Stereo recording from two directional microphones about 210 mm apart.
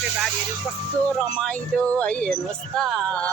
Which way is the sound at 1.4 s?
5° left (ahead or behind).